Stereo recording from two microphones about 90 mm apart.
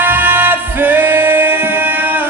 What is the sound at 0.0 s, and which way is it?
Music, 20° right (ahead or behind).